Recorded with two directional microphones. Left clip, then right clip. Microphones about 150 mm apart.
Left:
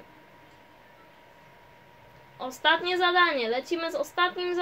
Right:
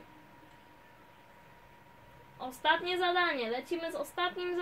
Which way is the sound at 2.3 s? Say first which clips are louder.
Left 6 dB; 60° left (ahead or behind).